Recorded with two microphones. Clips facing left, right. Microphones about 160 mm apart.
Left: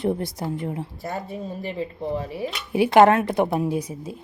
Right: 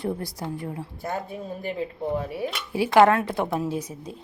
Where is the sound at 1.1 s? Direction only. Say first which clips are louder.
Right 1 dB; centre (ahead or behind).